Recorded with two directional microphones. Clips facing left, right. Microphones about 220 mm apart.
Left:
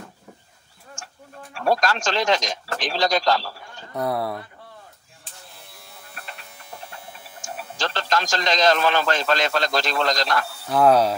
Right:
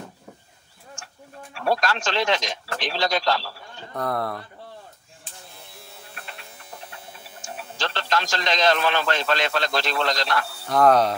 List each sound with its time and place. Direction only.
1.5 s speech: 45° left (ahead or behind)
3.9 s speech: 10° left (ahead or behind)
7.4 s a man's voice: 45° left (ahead or behind)
10.7 s speech: 5° left (ahead or behind)